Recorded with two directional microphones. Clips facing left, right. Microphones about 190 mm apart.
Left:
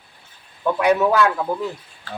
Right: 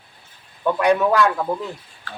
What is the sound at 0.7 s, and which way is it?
Speech, 5° left (ahead or behind).